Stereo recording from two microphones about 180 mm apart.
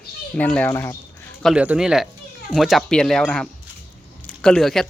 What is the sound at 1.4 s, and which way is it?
Speech, centre (ahead or behind).